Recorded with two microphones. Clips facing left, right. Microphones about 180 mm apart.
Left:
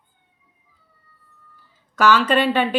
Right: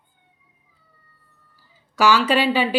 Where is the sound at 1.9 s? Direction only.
10° right (ahead or behind).